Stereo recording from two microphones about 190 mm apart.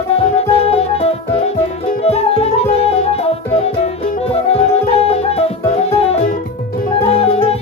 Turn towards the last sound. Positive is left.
turn(degrees=30)  # may be behind; listen again after turning